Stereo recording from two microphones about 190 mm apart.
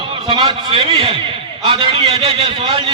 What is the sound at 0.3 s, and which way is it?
A man's voice, 25° right (ahead or behind).